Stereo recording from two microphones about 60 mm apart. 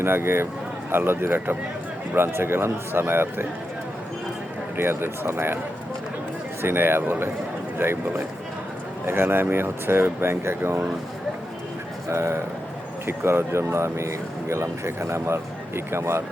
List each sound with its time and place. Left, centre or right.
0.0 s speech: right
4.8 s speech: right
6.6 s speech: right
12.0 s speech: right